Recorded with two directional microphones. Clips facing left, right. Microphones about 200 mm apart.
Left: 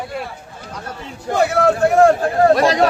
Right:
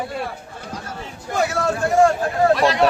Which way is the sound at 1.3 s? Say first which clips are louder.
Left 6 dB; 60° left (ahead or behind).